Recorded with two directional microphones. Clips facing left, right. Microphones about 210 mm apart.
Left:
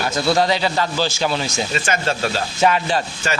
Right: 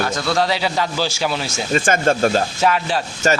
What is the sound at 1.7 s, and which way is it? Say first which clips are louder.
Speech: right 8 dB; 50° right (ahead or behind).